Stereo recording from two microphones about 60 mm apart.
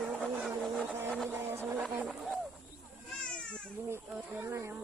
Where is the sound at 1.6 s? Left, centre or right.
Right.